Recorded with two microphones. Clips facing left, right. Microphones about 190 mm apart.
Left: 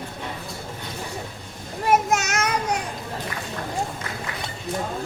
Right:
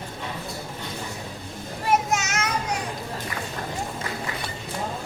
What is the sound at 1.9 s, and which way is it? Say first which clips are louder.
Child singing: left 3 dB; 50° left (ahead or behind).